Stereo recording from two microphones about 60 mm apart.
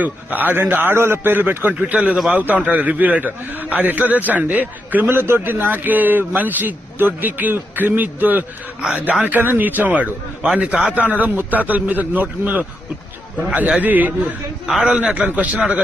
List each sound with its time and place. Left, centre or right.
0.0 s a man's voice: right
14.7 s a man's voice: centre
14.9 s a man's voice: right